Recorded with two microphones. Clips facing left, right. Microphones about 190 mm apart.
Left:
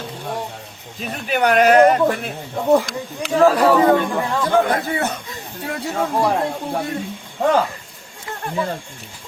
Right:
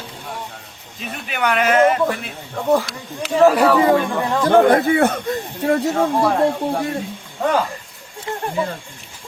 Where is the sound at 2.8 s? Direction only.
5° right (ahead or behind).